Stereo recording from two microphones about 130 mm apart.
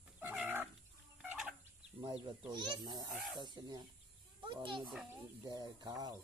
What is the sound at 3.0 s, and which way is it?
Speech, centre (ahead or behind).